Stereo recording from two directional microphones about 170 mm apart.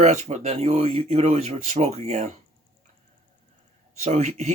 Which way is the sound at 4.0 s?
40° right (ahead or behind).